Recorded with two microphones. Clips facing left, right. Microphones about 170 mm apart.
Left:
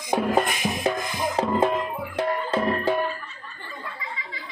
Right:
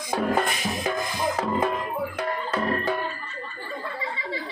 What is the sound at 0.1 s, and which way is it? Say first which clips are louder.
Music: left 2 dB; 20° left (ahead or behind).